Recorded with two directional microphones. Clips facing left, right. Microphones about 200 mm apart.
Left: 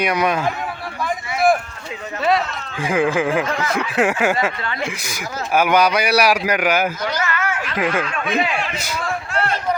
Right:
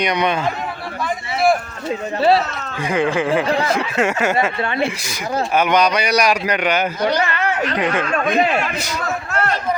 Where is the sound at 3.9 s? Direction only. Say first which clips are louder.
Left 2 dB; 10° left (ahead or behind).